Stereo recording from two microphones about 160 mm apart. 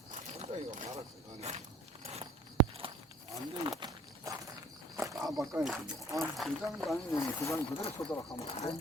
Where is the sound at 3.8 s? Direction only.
20° right (ahead or behind).